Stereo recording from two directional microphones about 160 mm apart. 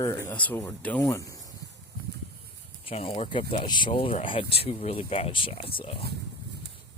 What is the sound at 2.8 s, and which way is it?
Speech, 35° left (ahead or behind).